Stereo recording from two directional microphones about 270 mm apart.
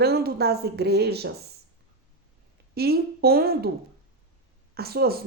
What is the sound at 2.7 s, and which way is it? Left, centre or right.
Speech, right.